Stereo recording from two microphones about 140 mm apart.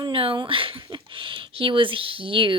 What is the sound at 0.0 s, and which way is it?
Speech, 40° right (ahead or behind).